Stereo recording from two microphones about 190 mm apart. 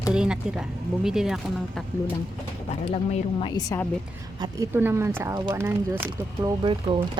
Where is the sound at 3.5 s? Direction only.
20° left (ahead or behind).